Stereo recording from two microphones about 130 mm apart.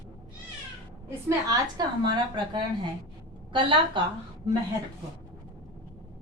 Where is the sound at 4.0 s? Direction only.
40° right (ahead or behind).